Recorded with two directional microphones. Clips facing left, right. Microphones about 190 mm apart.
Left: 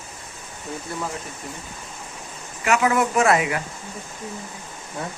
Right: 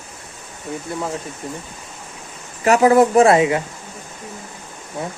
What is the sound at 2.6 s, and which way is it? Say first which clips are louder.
Speech: right 8 dB; 35° right (ahead or behind).